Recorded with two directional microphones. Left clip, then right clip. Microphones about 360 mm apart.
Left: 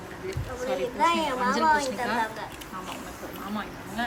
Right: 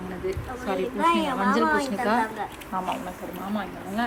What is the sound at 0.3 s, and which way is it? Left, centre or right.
A woman's voice, centre.